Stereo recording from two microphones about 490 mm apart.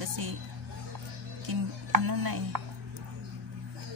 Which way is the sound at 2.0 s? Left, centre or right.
Right.